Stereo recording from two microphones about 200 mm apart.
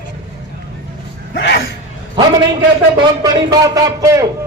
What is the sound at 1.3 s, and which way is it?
Gasp, 60° left (ahead or behind).